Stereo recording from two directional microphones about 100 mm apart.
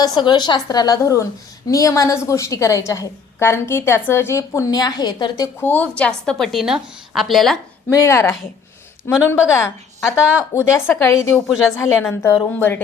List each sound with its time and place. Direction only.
0.0 s a woman's voice: 45° left (ahead or behind)
5.5 s a woman's voice: 20° left (ahead or behind); by 7.6 s centre (ahead or behind)
7.9 s a woman's voice: 30° left (ahead or behind)